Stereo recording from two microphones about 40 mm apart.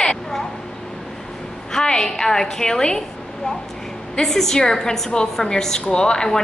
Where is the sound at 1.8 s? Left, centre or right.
Centre.